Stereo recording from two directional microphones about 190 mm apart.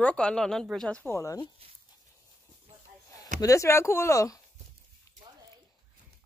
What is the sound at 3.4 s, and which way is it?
Speech, 15° left (ahead or behind).